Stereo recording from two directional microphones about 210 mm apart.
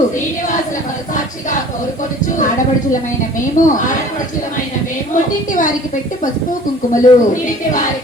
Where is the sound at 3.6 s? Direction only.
40° left (ahead or behind).